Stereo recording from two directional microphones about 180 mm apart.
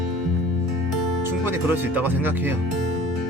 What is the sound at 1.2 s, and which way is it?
Speech, 15° right (ahead or behind).